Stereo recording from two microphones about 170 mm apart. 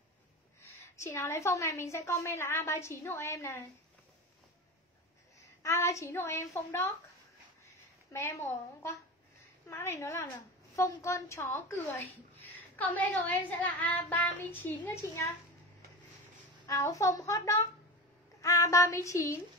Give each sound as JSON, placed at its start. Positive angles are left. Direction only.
{"t": 0.7, "sound": "a woman's voice", "side_deg": 15}
{"t": 5.6, "sound": "a woman's voice", "side_deg": 15}
{"t": 16.6, "sound": "a woman's voice", "side_deg": 20}